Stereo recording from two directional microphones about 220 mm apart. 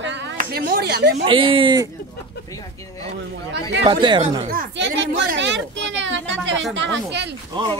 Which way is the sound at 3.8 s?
20° right (ahead or behind).